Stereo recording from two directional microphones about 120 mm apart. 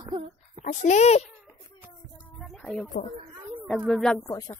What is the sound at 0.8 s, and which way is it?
Speech, 75° left (ahead or behind).